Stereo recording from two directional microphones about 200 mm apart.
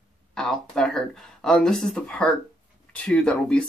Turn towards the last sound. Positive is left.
turn(degrees=5)  # may be behind; listen again after turning